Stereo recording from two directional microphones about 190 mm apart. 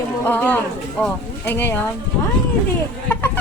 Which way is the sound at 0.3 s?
10° left (ahead or behind).